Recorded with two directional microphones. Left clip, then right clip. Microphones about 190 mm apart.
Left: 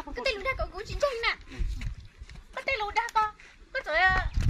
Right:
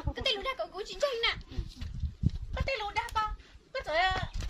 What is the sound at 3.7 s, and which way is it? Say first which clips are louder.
Speech: left 5 dB; centre (ahead or behind).